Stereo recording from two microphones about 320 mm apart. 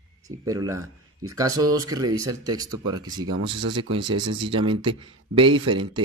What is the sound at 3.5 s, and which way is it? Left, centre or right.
Speech, right.